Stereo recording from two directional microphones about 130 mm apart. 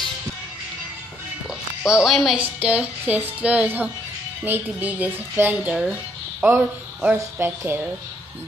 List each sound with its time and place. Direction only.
1.8 s speech: 5° right (ahead or behind)
2.4 s music: 10° right (ahead or behind)
6.4 s speech: 10° right (ahead or behind)
7.2 s music: 20° right (ahead or behind)